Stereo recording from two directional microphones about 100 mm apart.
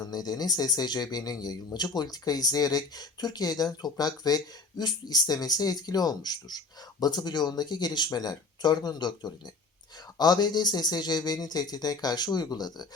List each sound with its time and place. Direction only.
0.1 s speech: 40° left (ahead or behind)